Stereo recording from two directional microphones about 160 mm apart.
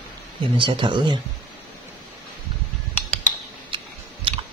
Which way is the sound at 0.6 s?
30° right (ahead or behind).